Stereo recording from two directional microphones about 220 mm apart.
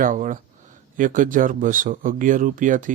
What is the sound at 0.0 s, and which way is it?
Speech, 35° right (ahead or behind).